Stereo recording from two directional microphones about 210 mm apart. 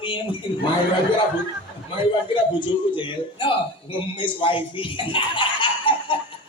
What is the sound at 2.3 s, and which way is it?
Speech, 25° left (ahead or behind).